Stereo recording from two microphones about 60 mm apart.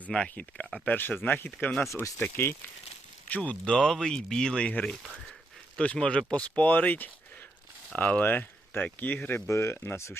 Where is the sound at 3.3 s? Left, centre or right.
Left.